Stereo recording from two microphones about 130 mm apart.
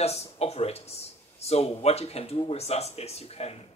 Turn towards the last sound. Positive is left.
turn(degrees=50)  # may be behind; listen again after turning